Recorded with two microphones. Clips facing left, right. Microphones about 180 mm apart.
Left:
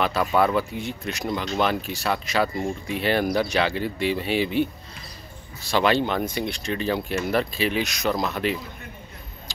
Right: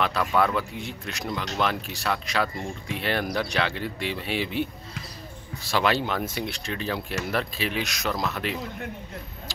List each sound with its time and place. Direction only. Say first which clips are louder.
0.0 s speech: left 2 dB; 5° left (ahead or behind)
5.7 s speech: left 3 dB; centre (ahead or behind)